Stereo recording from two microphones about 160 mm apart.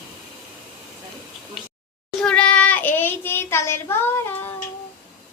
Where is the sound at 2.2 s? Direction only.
5° left (ahead or behind).